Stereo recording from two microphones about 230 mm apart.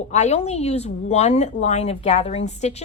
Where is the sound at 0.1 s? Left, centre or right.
Left.